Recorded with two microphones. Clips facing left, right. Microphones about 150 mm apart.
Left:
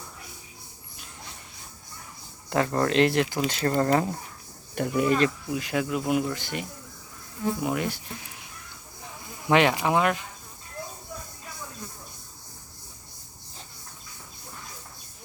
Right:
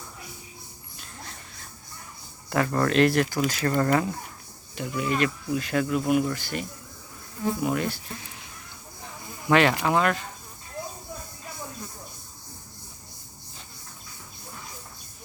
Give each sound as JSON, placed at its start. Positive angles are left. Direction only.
{"t": 0.9, "sound": "a sound", "side_deg": 15}
{"t": 2.5, "sound": "speech", "side_deg": 25}
{"t": 4.7, "sound": "speech", "side_deg": 50}
{"t": 5.5, "sound": "speech", "side_deg": 15}
{"t": 9.5, "sound": "speech", "side_deg": 15}